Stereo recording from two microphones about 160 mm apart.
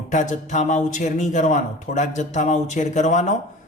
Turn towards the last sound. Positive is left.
turn(degrees=50)  # may be behind; listen again after turning